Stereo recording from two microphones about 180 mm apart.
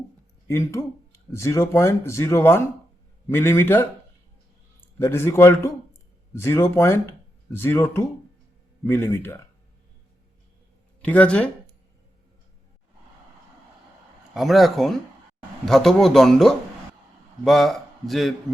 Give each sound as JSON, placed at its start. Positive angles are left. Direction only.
{"t": 0.4, "sound": "speech", "side_deg": 15}
{"t": 4.9, "sound": "speech", "side_deg": 15}
{"t": 11.0, "sound": "speech", "side_deg": 10}
{"t": 14.3, "sound": "a man's voice", "side_deg": 0}